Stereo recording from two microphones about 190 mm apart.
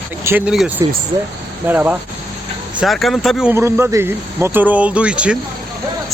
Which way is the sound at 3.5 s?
10° right (ahead or behind).